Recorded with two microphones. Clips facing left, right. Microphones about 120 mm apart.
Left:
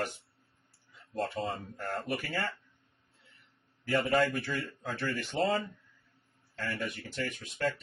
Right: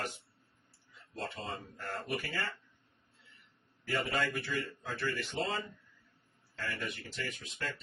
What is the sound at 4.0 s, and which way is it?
Speech, 45° left (ahead or behind).